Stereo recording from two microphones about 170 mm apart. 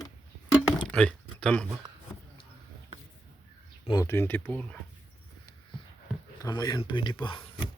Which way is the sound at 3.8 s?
20° left (ahead or behind).